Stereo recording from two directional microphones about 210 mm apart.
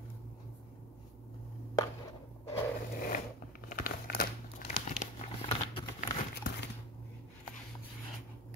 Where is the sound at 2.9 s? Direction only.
45° left (ahead or behind).